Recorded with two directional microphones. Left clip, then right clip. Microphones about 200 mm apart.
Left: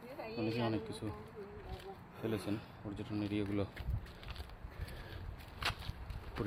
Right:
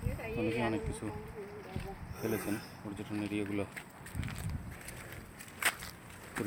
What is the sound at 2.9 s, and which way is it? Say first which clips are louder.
Speech: right 2 dB; 15° left (ahead or behind).